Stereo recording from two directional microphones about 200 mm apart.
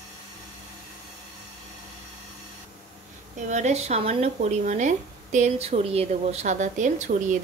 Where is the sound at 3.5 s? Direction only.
35° right (ahead or behind).